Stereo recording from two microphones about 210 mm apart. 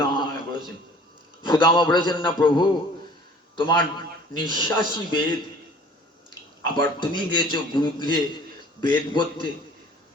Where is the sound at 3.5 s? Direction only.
20° left (ahead or behind).